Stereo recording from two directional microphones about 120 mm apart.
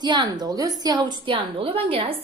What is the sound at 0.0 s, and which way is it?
A woman's voice, 40° right (ahead or behind).